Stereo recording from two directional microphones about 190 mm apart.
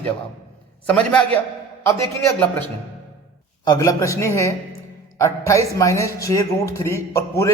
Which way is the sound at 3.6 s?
20° left (ahead or behind).